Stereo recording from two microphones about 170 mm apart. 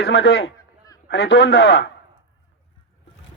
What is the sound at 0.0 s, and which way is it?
A man's voice, 90° left.